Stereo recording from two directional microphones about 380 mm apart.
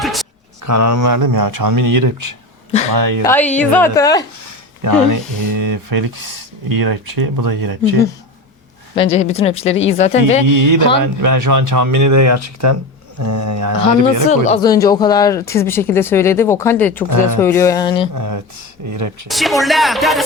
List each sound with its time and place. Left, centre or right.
0.0 s a sound: centre
0.6 s speech: right
3.2 s a woman's voice: centre
4.8 s speech: right
9.0 s speech: centre
10.5 s speech: right
14.3 s speech: centre
17.1 s speech: right
17.3 s speech: centre
18.1 s speech: right
19.3 s a woman's voice: centre